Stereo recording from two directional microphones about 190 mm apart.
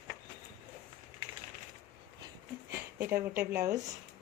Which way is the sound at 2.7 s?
15° right (ahead or behind).